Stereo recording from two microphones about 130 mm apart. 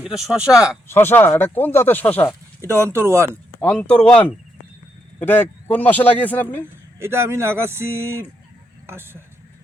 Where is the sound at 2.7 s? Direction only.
20° right (ahead or behind).